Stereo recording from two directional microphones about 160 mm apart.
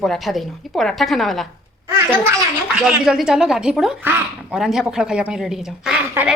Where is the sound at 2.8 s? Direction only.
5° right (ahead or behind).